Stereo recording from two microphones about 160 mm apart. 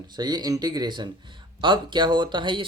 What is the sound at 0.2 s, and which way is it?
Speech, 25° right (ahead or behind).